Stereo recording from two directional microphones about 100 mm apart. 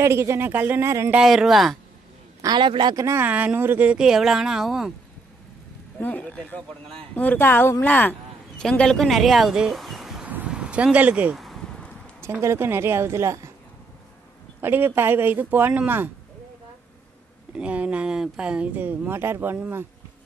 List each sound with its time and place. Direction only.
0.0 s speech: 25° right (ahead or behind)
1.2 s speech: centre (ahead or behind)
2.4 s a man's voice: 50° right (ahead or behind)
3.0 s speech: 30° right (ahead or behind)
3.3 s speech: 15° right (ahead or behind)
5.9 s a man's voice: 15° left (ahead or behind); by 10.2 s centre (ahead or behind)
10.2 s a sound: 15° right (ahead or behind)
11.3 s a sound: centre (ahead or behind)
12.2 s speech: 25° right (ahead or behind)
14.6 s speech: 20° right (ahead or behind)
17.6 s speech: 15° right (ahead or behind)